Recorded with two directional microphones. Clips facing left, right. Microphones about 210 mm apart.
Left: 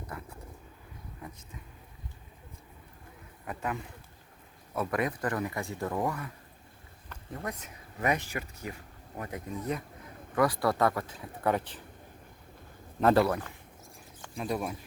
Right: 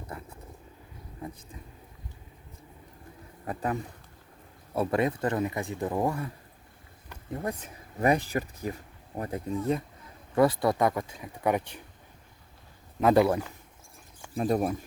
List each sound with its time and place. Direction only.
3.4 s speech: 35° right (ahead or behind)
7.3 s speech: 30° right (ahead or behind); by 11.8 s 15° right (ahead or behind)
13.0 s speech: 10° right (ahead or behind)
14.3 s speech: 45° right (ahead or behind)